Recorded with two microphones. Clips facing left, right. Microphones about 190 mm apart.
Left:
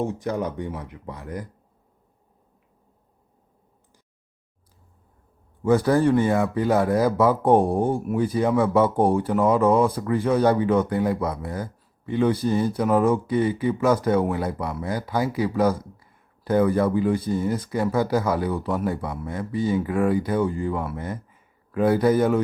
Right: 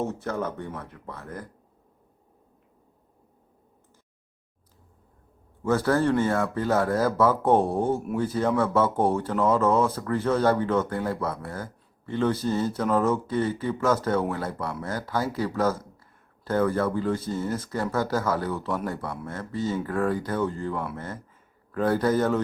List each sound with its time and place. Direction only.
0.0 s speech: 15° left (ahead or behind)
5.6 s speech: 15° left (ahead or behind)